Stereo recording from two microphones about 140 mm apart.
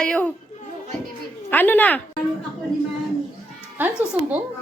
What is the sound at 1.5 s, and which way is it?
Speech, 15° left (ahead or behind).